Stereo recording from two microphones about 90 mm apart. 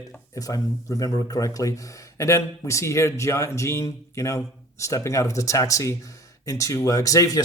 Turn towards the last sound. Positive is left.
turn(degrees=40)  # may be behind; listen again after turning